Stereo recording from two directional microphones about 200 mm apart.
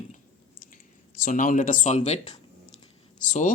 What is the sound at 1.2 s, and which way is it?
Speech, 40° left (ahead or behind).